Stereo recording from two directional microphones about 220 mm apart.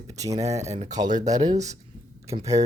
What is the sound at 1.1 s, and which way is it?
Speech, 15° right (ahead or behind).